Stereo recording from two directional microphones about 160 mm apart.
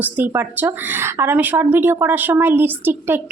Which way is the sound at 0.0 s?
10° right (ahead or behind).